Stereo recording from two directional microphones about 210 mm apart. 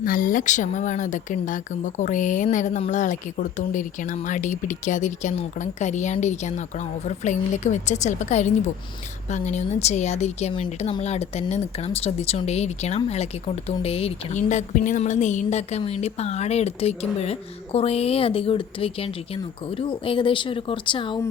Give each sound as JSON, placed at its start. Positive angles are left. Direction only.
{"t": 0.0, "sound": "a woman's voice", "side_deg": 40}